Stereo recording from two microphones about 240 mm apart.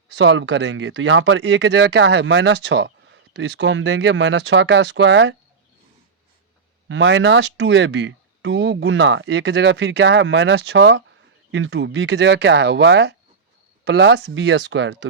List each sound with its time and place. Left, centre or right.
0.2 s speech: right
6.8 s speech: right